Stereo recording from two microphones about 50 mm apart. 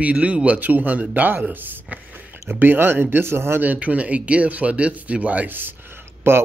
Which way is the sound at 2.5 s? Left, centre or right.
Right.